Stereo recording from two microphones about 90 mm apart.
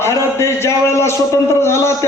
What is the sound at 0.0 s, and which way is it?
A man's voice, 30° left (ahead or behind).